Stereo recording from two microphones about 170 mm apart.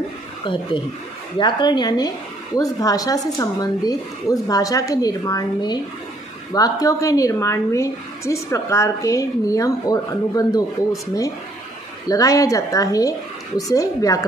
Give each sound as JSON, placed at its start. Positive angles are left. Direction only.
{"t": 0.5, "sound": "a woman's voice", "side_deg": 30}